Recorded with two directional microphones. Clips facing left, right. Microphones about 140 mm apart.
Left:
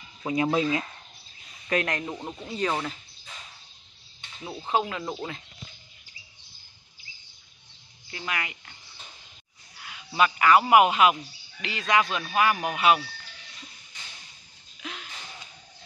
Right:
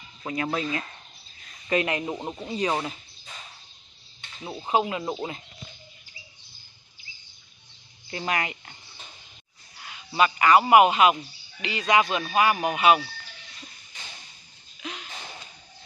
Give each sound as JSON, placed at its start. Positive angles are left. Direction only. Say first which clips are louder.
{"t": 0.2, "sound": "speech", "louder": "left 4 dB", "side_deg": 20}
{"t": 1.7, "sound": "speech", "louder": "right 2 dB", "side_deg": -5}
{"t": 2.0, "sound": "speech", "louder": "right 3 dB", "side_deg": -20}
{"t": 4.5, "sound": "speech", "louder": "right 2 dB", "side_deg": -15}
{"t": 8.1, "sound": "speech", "louder": "right 5 dB", "side_deg": -35}
{"t": 9.8, "sound": "speech", "louder": "right 1 dB", "side_deg": 0}
{"t": 14.8, "sound": "a sound", "louder": "right 2 dB", "side_deg": 0}